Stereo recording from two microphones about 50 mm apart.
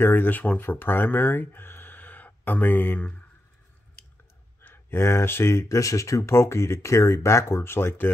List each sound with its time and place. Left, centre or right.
0.0 s speech: left
0.3 s speech: left
0.7 s speech: left
4.8 s speech: left